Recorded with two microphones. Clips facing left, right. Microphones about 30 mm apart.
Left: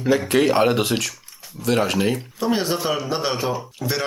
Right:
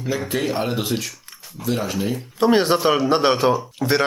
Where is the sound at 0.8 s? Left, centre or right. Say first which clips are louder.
Left 3 dB; left.